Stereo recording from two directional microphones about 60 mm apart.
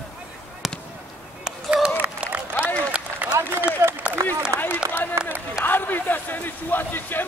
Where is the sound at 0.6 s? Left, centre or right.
Centre.